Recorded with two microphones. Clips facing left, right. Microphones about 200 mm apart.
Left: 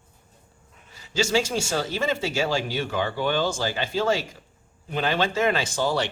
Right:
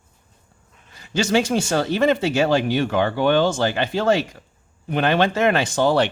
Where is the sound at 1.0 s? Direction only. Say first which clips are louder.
Right 4 dB; 55° right (ahead or behind).